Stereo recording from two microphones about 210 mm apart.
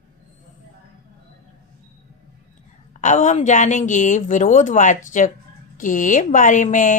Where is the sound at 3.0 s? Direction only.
35° left (ahead or behind).